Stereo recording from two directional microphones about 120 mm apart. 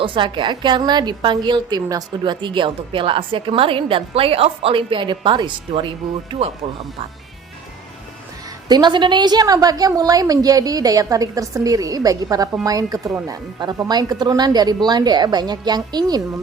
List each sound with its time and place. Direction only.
0.0 s a woman's voice: 45° right (ahead or behind)
8.6 s a woman's voice: 35° right (ahead or behind)